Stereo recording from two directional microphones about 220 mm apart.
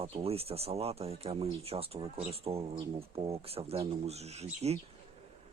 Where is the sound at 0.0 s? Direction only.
25° right (ahead or behind).